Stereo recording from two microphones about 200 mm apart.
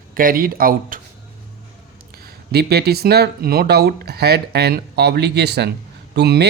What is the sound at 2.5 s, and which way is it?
A man's voice, 50° right (ahead or behind).